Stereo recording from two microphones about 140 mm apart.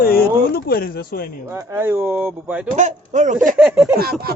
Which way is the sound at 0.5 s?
90° left.